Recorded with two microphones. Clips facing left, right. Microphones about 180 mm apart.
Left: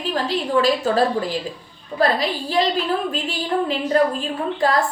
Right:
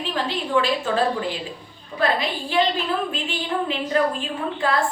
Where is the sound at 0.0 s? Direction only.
40° left (ahead or behind).